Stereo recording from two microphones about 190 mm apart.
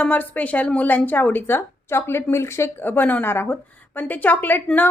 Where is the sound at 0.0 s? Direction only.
10° left (ahead or behind).